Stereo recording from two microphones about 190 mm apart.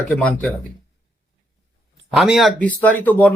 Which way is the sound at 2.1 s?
Centre (ahead or behind).